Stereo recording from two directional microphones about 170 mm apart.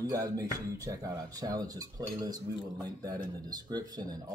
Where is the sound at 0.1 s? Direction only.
20° right (ahead or behind).